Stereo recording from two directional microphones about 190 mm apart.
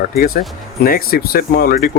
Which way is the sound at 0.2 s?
50° left (ahead or behind).